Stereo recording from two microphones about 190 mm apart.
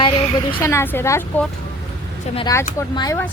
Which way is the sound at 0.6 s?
10° left (ahead or behind).